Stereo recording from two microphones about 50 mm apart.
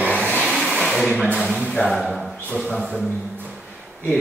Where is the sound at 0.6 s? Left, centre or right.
Centre.